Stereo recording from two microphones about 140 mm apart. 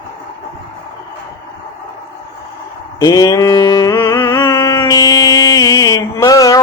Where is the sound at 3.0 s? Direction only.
30° left (ahead or behind).